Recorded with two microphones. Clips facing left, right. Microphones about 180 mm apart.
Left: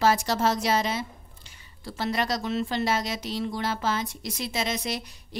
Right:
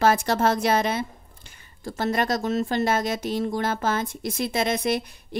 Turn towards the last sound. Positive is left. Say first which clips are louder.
# right 6 dB
turn(degrees=-55)  # may be behind; listen again after turning